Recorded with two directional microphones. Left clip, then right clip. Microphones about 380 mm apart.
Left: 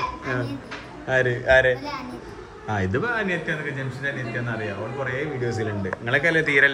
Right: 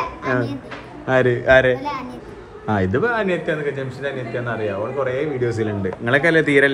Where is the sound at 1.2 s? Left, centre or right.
Centre.